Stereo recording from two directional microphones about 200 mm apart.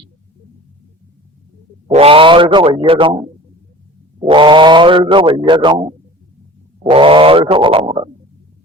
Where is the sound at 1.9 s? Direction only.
30° right (ahead or behind).